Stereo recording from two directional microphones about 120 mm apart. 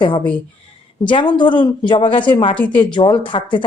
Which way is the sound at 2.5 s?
10° left (ahead or behind).